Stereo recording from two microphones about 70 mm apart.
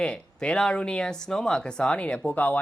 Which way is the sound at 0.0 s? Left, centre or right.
Centre.